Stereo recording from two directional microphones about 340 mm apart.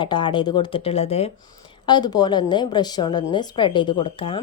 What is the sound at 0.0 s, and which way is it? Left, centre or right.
Speech, centre.